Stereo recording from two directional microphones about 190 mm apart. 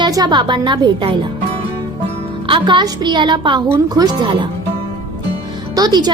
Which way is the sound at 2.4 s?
25° right (ahead or behind).